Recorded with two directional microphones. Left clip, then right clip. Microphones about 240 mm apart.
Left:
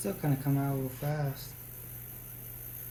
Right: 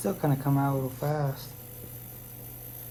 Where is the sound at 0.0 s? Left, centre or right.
Right.